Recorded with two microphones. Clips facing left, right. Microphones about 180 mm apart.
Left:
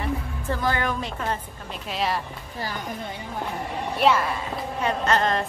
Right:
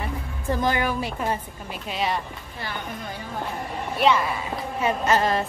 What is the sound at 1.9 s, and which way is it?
Speech, centre (ahead or behind).